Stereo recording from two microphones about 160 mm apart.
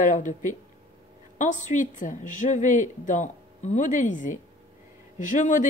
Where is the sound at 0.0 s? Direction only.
50° left (ahead or behind).